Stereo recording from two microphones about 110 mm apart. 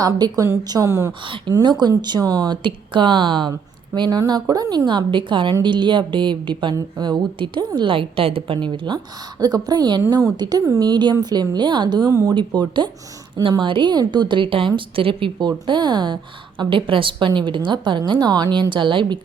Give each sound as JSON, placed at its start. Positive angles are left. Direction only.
{"t": 0.0, "sound": "a woman's voice", "side_deg": -35}
{"t": 1.5, "sound": "a woman's voice", "side_deg": -45}
{"t": 4.9, "sound": "a woman's voice", "side_deg": -45}
{"t": 9.4, "sound": "a woman's voice", "side_deg": -35}
{"t": 12.3, "sound": "a woman's voice", "side_deg": -45}